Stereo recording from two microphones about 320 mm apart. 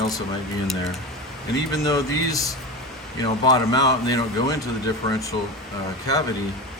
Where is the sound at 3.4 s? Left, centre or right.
Centre.